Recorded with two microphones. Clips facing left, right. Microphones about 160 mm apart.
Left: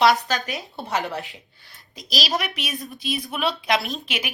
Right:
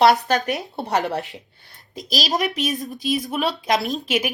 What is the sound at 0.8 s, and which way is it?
Speech, 60° right (ahead or behind).